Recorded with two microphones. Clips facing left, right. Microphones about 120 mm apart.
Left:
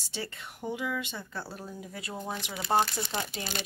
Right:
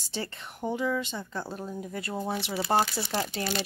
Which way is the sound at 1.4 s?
20° right (ahead or behind).